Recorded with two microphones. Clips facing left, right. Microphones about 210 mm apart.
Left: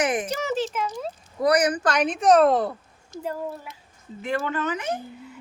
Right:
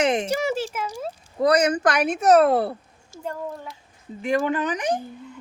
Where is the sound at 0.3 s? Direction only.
10° right (ahead or behind).